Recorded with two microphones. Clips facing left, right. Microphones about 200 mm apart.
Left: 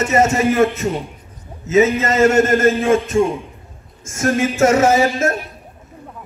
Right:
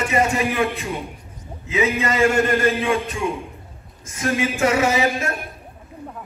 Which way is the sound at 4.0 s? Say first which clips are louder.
Left 5 dB; 45° left (ahead or behind).